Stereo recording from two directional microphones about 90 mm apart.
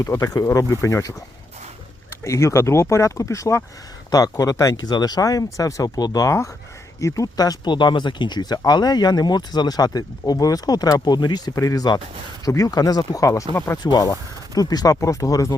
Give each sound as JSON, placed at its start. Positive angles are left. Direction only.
{"t": 0.0, "sound": "speech", "side_deg": 35}
{"t": 2.2, "sound": "speech", "side_deg": 35}